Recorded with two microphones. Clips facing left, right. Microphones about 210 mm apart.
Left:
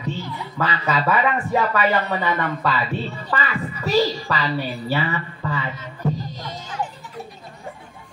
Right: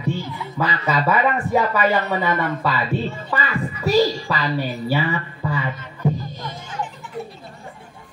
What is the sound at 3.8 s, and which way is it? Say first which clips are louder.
A man's voice: right 2 dB; 15° right (ahead or behind).